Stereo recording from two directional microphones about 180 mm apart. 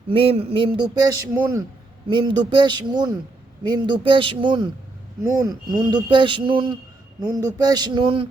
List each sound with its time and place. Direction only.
0.1 s a man's voice: 30° right (ahead or behind)